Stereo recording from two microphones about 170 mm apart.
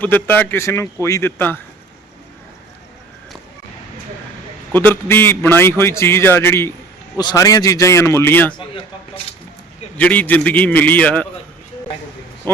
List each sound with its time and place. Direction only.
0.0 s a man's voice: 10° left (ahead or behind)
4.7 s a man's voice: 10° left (ahead or behind)
8.5 s speech: 30° left (ahead or behind)
10.0 s a man's voice: 10° left (ahead or behind)